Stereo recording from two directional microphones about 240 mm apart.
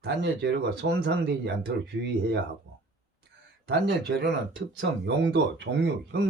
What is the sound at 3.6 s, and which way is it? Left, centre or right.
Speech, right.